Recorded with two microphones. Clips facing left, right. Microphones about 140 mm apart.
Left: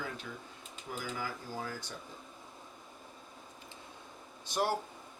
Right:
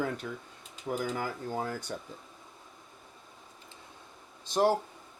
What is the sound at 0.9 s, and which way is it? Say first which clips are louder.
Speech: right 9 dB; 70° right (ahead or behind).